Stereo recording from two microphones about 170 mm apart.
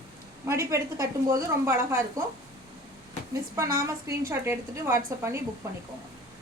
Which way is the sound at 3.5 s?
15° right (ahead or behind).